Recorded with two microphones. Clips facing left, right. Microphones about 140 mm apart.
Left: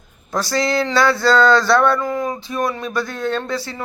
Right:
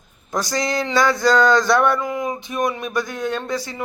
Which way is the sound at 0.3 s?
15° right (ahead or behind).